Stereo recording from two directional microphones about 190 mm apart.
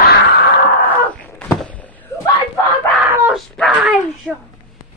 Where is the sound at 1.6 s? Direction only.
10° left (ahead or behind).